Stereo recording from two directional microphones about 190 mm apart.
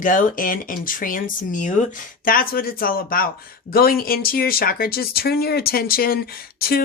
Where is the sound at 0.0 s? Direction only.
45° left (ahead or behind).